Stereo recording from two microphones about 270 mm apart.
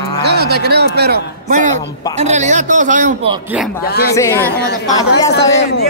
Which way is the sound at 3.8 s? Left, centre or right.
Left.